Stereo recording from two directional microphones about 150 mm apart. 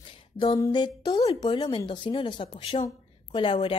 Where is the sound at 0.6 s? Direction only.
30° left (ahead or behind).